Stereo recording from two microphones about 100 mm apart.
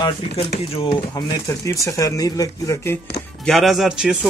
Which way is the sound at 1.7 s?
30° left (ahead or behind).